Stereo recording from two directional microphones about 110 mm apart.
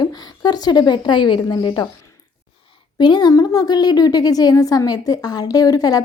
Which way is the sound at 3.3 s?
30° left (ahead or behind).